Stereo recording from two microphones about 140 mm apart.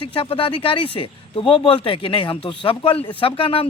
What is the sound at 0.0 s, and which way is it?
Speech, 40° left (ahead or behind).